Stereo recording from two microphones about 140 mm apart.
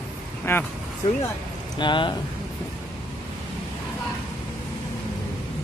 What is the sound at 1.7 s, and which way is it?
Speech, 35° left (ahead or behind).